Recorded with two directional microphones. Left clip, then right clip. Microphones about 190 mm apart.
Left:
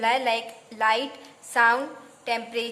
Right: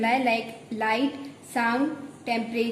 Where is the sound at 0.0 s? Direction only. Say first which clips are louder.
Even; 30° left (ahead or behind).